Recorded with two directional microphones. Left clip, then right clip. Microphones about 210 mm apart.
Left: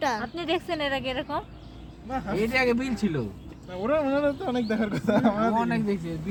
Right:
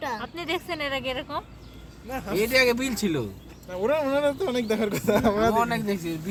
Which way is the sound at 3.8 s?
30° right (ahead or behind).